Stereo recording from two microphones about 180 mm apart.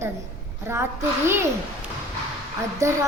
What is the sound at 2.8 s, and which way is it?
Speech, 15° right (ahead or behind).